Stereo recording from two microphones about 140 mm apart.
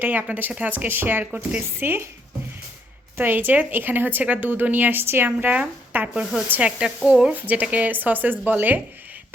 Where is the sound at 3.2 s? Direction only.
15° right (ahead or behind).